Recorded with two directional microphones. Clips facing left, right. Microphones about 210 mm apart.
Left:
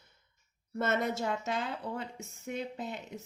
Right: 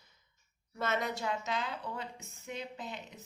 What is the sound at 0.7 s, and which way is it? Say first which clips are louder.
A woman's voice: left 4 dB; 55° left (ahead or behind).